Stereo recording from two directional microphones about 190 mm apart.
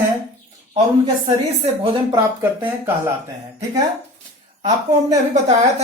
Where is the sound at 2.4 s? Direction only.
10° right (ahead or behind).